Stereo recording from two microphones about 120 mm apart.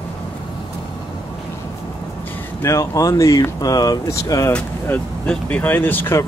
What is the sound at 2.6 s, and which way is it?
Speech, 25° left (ahead or behind).